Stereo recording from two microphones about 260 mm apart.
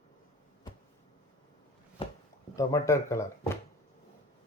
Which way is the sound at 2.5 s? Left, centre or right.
Centre.